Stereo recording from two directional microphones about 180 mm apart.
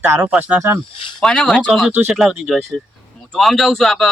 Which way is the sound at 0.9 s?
30° left (ahead or behind).